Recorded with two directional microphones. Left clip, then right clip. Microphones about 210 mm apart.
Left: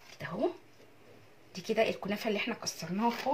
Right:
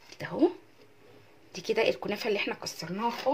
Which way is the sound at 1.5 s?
50° right (ahead or behind).